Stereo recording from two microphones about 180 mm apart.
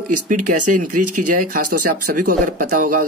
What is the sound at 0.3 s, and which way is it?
Speech, 50° right (ahead or behind).